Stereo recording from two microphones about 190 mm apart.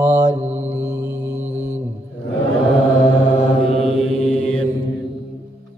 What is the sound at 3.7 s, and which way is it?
Mantra, 30° left (ahead or behind).